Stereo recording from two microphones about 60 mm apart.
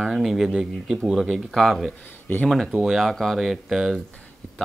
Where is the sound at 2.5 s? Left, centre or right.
Centre.